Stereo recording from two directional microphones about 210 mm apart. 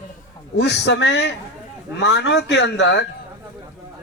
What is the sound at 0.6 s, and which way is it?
A man's voice, 55° left (ahead or behind).